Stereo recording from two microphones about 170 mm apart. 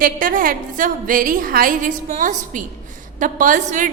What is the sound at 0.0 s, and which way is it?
A woman's voice, 55° right (ahead or behind).